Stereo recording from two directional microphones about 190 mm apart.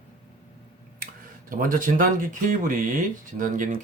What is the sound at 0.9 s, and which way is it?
Speech, 45° right (ahead or behind).